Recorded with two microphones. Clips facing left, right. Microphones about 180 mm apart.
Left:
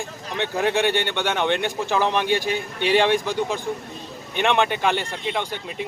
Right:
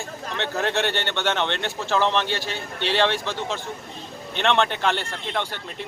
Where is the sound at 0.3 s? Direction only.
15° left (ahead or behind).